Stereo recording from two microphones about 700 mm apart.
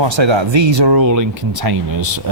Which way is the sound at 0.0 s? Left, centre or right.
Right.